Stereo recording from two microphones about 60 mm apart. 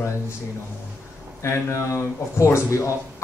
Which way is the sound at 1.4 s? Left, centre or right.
Left.